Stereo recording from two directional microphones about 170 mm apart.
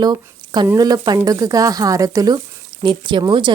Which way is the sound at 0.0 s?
25° right (ahead or behind).